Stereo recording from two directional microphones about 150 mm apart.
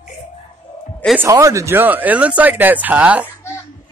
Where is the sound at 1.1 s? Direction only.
20° right (ahead or behind).